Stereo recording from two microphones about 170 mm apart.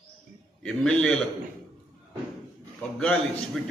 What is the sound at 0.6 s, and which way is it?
Speech, 5° left (ahead or behind).